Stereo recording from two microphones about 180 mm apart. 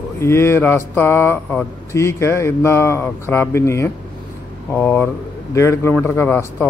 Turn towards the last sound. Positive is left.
turn(degrees=10)  # may be behind; listen again after turning